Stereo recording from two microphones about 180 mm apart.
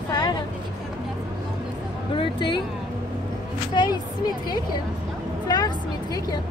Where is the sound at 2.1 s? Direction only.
25° left (ahead or behind).